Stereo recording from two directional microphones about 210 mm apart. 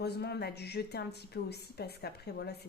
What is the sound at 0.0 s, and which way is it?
Speech, 50° left (ahead or behind).